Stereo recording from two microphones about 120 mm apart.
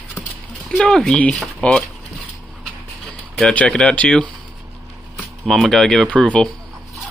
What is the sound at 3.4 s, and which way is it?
Speech, 10° left (ahead or behind).